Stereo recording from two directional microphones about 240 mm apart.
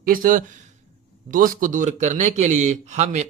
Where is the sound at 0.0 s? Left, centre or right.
Right.